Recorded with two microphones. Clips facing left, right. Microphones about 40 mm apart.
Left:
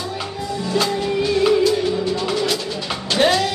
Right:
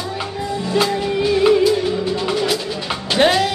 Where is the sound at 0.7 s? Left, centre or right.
Centre.